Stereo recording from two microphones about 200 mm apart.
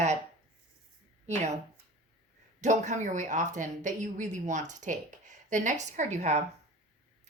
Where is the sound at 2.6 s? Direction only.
35° right (ahead or behind).